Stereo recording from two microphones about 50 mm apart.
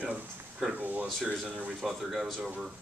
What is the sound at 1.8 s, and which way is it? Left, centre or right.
Speech, centre.